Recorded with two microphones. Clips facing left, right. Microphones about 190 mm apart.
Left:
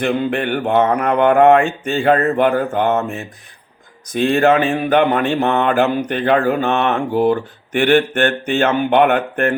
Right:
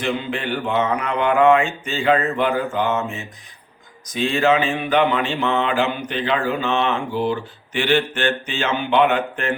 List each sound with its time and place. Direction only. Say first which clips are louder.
0.0 s mantra: left 6 dB; 55° left (ahead or behind)
6.7 s mantra: left 4 dB; 60° left (ahead or behind)